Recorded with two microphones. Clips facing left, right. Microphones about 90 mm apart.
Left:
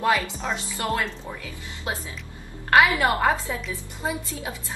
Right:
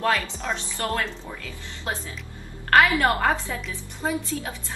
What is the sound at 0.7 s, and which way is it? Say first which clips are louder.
A woman's voice: left 1 dB; 15° left (ahead or behind).